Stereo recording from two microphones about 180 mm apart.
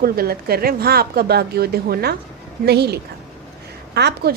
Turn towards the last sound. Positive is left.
turn(degrees=-65)  # may be behind; listen again after turning